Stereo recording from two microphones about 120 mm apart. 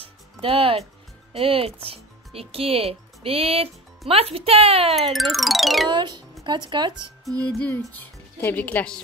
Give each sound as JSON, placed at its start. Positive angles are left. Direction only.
{"t": 0.0, "sound": "music", "side_deg": -50}
{"t": 1.3, "sound": "speech", "side_deg": -50}
{"t": 4.9, "sound": "speech", "side_deg": 0}
{"t": 5.9, "sound": "speech", "side_deg": -40}
{"t": 7.4, "sound": "a woman's voice", "side_deg": 10}